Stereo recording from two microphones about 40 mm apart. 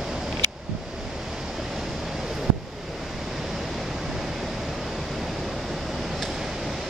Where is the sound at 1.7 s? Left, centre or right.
Centre.